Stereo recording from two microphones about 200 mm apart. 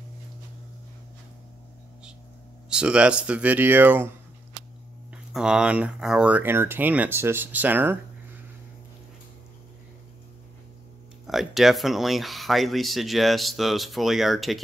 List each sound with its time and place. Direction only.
2.7 s speech: 5° right (ahead or behind)
5.1 s speech: 5° right (ahead or behind)
11.2 s speech: centre (ahead or behind)